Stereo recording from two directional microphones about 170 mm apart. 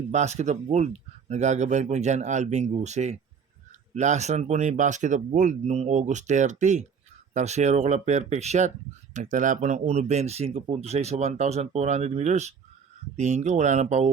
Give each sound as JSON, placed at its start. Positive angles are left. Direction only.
{"t": 0.1, "sound": "speech", "side_deg": -40}